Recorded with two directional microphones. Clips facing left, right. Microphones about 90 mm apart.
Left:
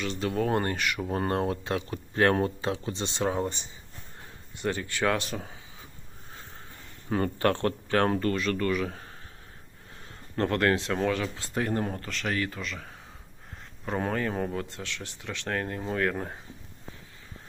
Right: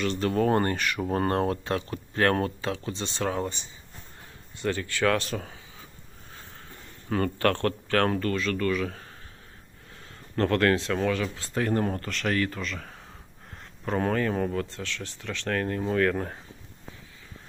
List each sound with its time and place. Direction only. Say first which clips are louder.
0.0 s speech: right 4 dB; 5° left (ahead or behind); by 5.3 s 20° left (ahead or behind)
7.1 s speech: right 1 dB; 20° left (ahead or behind)
10.3 s speech: right 2 dB; 15° left (ahead or behind)
11.8 s speech: right 3 dB; 10° left (ahead or behind)